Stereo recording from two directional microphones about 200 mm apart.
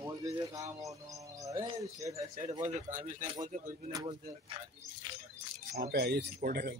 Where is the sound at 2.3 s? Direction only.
30° right (ahead or behind).